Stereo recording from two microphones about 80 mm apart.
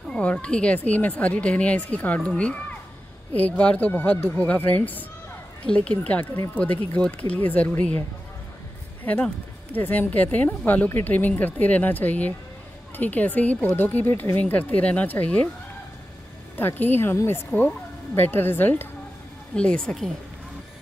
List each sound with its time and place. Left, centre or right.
0.1 s speech: centre
9.0 s speech: centre
16.5 s speech: left
17.5 s speech: centre
18.1 s speech: left
19.5 s speech: centre